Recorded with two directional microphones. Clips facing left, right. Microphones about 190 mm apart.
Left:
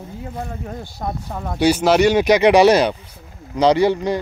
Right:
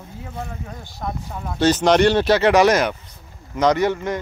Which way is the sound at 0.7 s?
40° left (ahead or behind).